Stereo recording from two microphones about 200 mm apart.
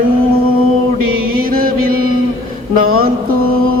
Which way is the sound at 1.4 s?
45° right (ahead or behind).